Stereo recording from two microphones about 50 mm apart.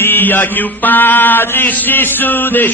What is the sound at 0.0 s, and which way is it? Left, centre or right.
Mantra, left.